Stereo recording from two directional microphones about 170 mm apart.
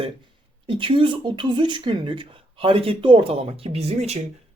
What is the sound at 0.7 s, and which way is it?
Speech, 30° right (ahead or behind).